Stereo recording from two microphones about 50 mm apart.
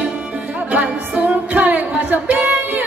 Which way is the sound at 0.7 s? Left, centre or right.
Right.